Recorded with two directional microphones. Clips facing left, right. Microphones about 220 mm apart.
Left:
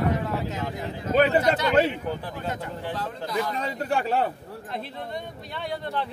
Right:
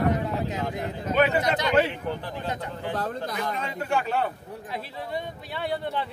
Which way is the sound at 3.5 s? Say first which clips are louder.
Left 1 dB; 35° left (ahead or behind).